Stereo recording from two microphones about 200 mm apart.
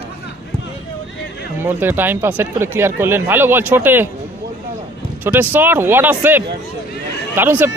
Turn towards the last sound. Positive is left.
turn(degrees=-10)  # may be behind; listen again after turning